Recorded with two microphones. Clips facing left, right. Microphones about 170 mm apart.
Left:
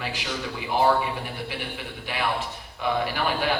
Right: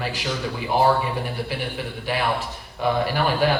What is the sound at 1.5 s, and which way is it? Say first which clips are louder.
Speech: right 5 dB; 40° right (ahead or behind).